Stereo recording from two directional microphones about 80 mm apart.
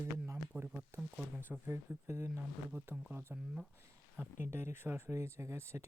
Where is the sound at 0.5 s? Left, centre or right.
Right.